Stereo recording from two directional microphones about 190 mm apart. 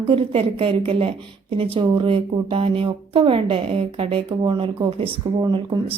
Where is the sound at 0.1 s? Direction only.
30° right (ahead or behind).